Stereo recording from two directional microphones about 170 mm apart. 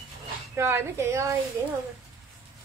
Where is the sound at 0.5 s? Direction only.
15° right (ahead or behind).